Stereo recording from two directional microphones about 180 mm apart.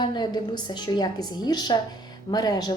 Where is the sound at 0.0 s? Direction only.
25° left (ahead or behind).